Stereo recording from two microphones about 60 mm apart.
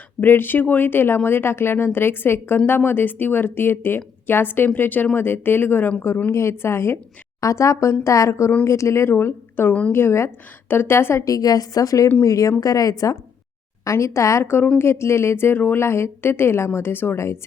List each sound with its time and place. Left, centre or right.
0.2 s speech: left
6.3 s speech: left
7.4 s speech: left
9.1 s speech: left
11.3 s a woman's voice: left
13.8 s speech: left